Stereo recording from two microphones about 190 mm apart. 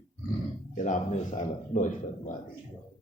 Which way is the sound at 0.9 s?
40° left (ahead or behind).